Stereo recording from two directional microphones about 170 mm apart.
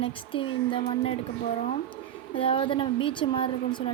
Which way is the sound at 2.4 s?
30° left (ahead or behind).